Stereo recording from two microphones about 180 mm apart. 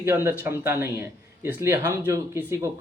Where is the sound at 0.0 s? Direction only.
15° right (ahead or behind).